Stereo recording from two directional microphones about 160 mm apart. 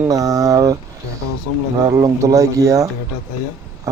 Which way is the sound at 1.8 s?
20° right (ahead or behind).